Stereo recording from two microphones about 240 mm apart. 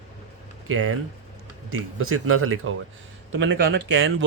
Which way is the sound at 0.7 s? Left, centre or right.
Right.